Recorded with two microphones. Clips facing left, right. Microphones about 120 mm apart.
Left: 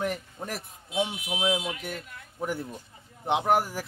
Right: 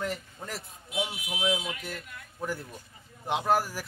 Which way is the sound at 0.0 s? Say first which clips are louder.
Left 3 dB; 20° left (ahead or behind).